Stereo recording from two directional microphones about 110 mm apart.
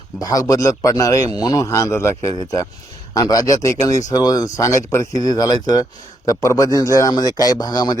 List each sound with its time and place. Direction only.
0.2 s speech: 35° left (ahead or behind)